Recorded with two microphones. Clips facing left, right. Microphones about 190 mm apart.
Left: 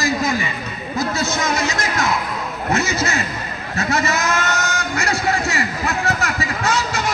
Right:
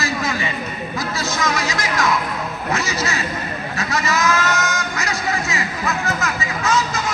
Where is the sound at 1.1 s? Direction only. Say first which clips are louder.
Even; 25° left (ahead or behind).